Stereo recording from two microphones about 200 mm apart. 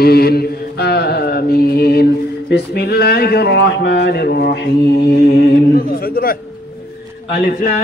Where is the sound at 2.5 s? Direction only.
50° left (ahead or behind).